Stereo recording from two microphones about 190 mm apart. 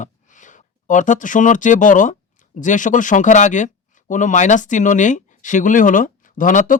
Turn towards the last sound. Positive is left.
turn(degrees=45)  # may be behind; listen again after turning